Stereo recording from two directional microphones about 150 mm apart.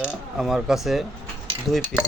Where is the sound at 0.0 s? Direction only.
5° right (ahead or behind).